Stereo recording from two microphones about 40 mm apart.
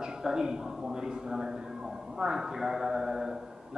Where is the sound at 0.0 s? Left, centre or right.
Centre.